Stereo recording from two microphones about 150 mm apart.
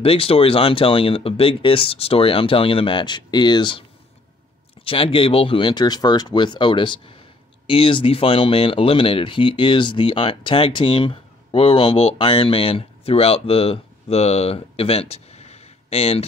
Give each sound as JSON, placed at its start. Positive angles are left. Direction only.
{"t": 0.0, "sound": "speech", "side_deg": 40}
{"t": 4.8, "sound": "speech", "side_deg": 35}